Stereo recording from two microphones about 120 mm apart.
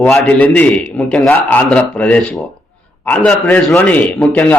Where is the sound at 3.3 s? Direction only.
15° left (ahead or behind).